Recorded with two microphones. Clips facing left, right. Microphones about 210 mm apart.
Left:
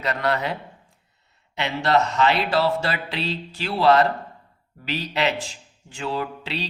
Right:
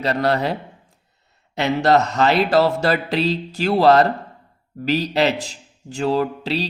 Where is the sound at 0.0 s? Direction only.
35° right (ahead or behind).